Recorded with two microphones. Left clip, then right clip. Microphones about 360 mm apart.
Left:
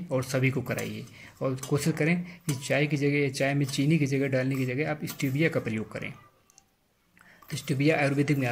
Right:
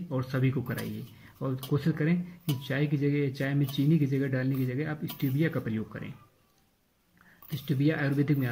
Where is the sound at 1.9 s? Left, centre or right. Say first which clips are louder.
Left 3 dB; centre.